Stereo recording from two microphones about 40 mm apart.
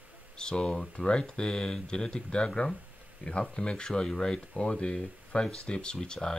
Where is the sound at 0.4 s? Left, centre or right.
Left.